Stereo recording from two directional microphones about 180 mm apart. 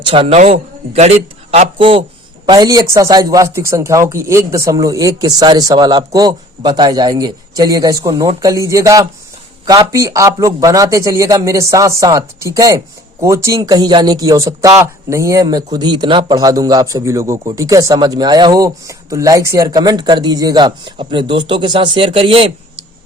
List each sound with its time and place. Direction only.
0.0 s a man's voice: 30° right (ahead or behind)